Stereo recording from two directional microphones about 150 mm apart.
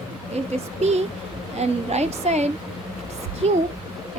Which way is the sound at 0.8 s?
45° right (ahead or behind).